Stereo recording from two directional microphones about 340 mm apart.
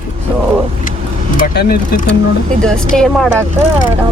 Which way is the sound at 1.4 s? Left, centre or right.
Left.